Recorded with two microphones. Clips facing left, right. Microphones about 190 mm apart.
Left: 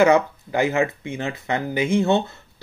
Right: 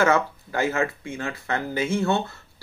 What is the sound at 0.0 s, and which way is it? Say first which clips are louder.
Speech: left 5 dB; 15° left (ahead or behind).